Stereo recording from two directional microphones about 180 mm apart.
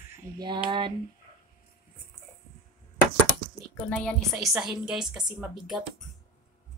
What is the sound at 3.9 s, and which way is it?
A woman's voice, 5° left (ahead or behind).